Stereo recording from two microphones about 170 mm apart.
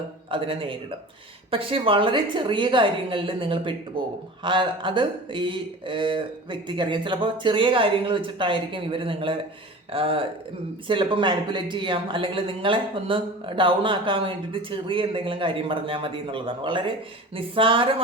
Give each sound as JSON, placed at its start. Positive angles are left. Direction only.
{"t": 0.3, "sound": "speech", "side_deg": -30}